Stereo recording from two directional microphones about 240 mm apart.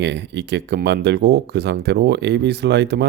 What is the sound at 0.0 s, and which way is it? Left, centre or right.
Speech, right.